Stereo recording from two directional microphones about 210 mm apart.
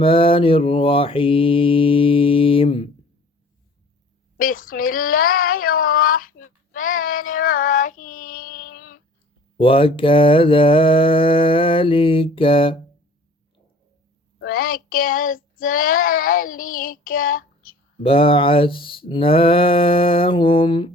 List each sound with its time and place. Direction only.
0.0 s mantra: 25° left (ahead or behind)
4.4 s a sound: 40° left (ahead or behind)
9.6 s mantra: 25° left (ahead or behind)
14.3 s child singing: 45° left (ahead or behind)
18.0 s mantra: 25° left (ahead or behind)